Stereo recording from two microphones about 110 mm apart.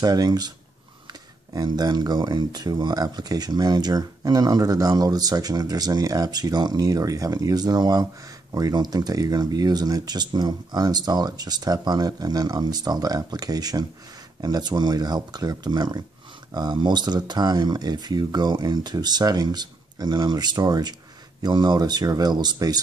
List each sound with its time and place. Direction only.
0.0 s speech: 35° right (ahead or behind)
1.5 s speech: 35° right (ahead or behind)